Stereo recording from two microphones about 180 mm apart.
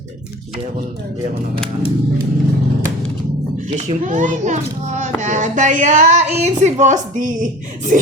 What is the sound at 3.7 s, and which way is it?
A child's voice, 35° right (ahead or behind).